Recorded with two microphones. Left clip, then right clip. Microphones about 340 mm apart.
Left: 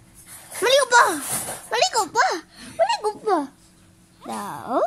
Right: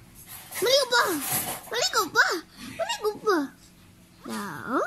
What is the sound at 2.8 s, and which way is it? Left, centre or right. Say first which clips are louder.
A child's voice: left 5 dB; centre.